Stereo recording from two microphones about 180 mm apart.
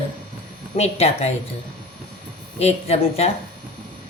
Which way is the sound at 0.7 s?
35° left (ahead or behind).